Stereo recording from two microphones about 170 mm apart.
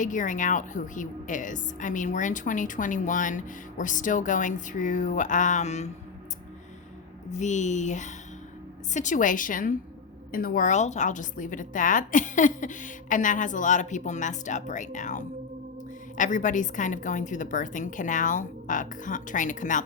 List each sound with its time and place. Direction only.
0.0 s a woman's voice: 50° left (ahead or behind)
7.3 s a woman's voice: 45° left (ahead or behind)